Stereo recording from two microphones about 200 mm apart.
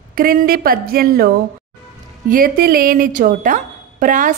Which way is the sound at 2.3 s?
45° right (ahead or behind).